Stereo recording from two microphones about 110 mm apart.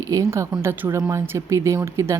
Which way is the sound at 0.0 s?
30° right (ahead or behind).